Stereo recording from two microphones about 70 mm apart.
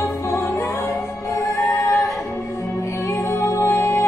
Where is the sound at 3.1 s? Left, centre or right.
Left.